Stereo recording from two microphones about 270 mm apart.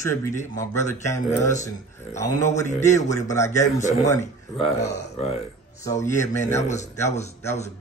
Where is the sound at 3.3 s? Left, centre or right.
Centre.